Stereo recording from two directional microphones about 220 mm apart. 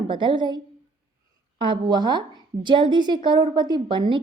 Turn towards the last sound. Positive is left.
turn(degrees=-20)  # may be behind; listen again after turning